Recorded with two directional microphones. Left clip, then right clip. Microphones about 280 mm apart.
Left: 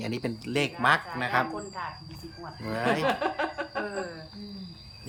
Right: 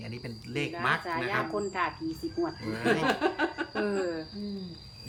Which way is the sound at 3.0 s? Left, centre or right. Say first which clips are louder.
Even; centre.